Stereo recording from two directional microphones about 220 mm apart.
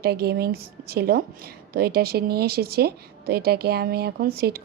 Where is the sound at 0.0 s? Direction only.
45° right (ahead or behind).